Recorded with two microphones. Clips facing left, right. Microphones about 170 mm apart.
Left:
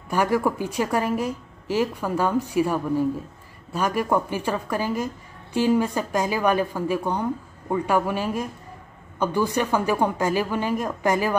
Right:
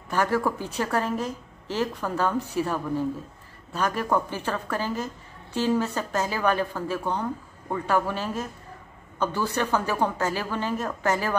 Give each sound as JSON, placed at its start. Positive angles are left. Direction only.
{"t": 0.1, "sound": "a woman's voice", "side_deg": 10}